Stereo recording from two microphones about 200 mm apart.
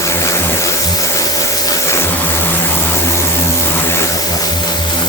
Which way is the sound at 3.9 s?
15° left (ahead or behind).